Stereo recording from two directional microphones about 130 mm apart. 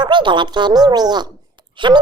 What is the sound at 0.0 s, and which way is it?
A child's voice, 35° right (ahead or behind).